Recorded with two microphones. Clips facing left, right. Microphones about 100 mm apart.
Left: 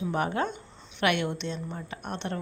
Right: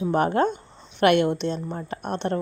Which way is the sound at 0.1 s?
45° right (ahead or behind).